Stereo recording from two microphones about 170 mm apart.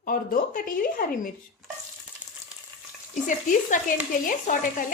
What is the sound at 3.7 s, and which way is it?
Speech, 50° left (ahead or behind).